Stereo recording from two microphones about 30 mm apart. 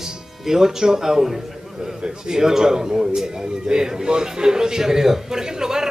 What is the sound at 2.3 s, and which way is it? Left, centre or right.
A man's voice, centre.